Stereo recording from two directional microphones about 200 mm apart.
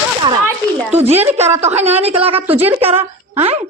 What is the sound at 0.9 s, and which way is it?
Speech, 30° right (ahead or behind).